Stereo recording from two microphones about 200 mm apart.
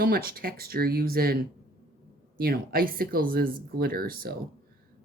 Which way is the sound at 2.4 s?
45° right (ahead or behind).